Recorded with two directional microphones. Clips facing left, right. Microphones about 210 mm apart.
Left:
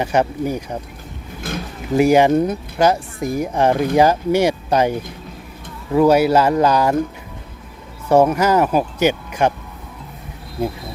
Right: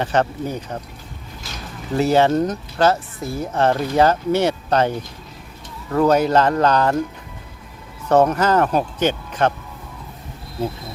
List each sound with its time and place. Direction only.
0.0 s speech: 10° left (ahead or behind)
1.4 s a sound: 55° left (ahead or behind)
2.0 s speech: 10° left (ahead or behind)
8.0 s speech: 10° left (ahead or behind)